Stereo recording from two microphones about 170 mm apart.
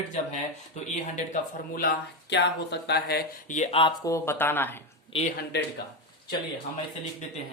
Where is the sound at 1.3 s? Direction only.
60° left (ahead or behind).